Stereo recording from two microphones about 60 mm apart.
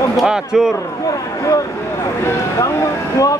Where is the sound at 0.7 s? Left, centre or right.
Left.